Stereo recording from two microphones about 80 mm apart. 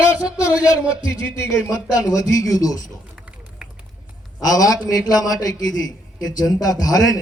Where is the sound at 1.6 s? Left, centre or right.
Left.